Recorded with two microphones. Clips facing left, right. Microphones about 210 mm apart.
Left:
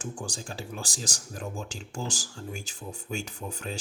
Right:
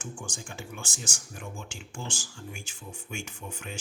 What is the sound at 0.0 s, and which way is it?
Speech, 35° left (ahead or behind).